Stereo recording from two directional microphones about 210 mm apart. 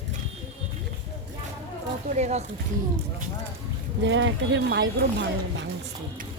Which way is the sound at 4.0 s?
60° right (ahead or behind).